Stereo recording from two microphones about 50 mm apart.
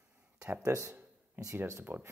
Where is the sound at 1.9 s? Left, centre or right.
Right.